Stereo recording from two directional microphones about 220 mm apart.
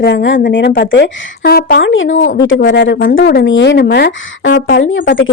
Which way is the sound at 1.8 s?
60° left (ahead or behind).